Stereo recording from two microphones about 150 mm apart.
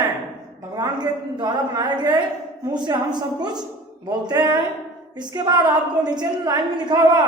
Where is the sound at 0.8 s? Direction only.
30° right (ahead or behind).